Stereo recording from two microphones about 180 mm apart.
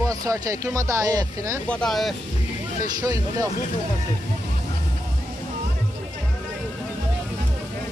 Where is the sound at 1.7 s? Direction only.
5° left (ahead or behind).